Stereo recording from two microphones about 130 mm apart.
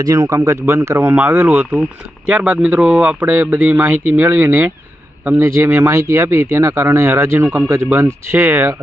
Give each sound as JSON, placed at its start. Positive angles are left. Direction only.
{"t": 0.0, "sound": "a man's voice", "side_deg": -30}